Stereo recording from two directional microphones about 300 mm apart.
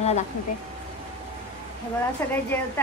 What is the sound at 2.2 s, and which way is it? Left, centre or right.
Speech, centre.